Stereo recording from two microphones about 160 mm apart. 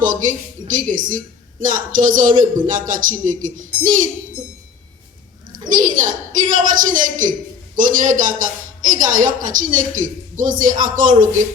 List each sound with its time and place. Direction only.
0.0 s a man's voice: 55° right (ahead or behind)
5.5 s a man's voice: 55° right (ahead or behind)